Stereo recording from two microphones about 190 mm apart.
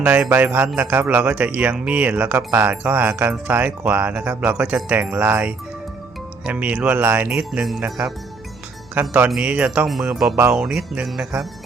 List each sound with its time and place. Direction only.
0.0 s speech: 5° right (ahead or behind)